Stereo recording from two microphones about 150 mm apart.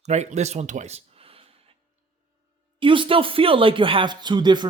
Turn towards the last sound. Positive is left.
turn(degrees=-30)  # may be behind; listen again after turning